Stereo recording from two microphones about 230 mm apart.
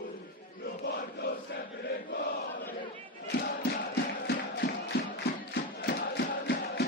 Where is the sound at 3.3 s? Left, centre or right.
Left.